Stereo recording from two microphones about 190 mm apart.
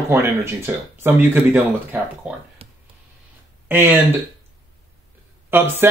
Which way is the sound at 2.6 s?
30° right (ahead or behind).